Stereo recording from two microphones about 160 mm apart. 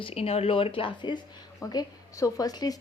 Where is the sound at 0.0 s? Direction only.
40° left (ahead or behind).